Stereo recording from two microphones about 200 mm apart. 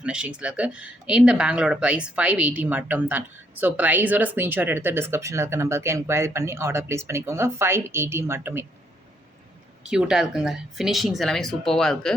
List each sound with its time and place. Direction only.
0.0 s speech: 5° right (ahead or behind)
9.8 s speech: 5° right (ahead or behind)